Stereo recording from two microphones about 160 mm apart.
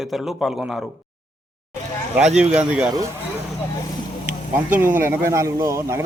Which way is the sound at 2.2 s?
5° right (ahead or behind).